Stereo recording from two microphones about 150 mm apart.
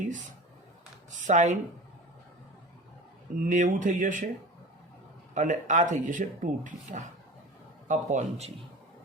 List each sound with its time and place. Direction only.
0.0 s a sound: 55° right (ahead or behind)
1.3 s speech: 50° right (ahead or behind)
3.4 s speech: 55° right (ahead or behind)
5.3 s speech: 55° right (ahead or behind)